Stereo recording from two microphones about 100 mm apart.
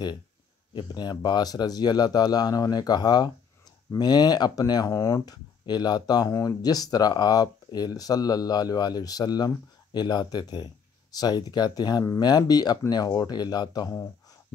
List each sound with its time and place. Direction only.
0.7 s speech: 45° left (ahead or behind)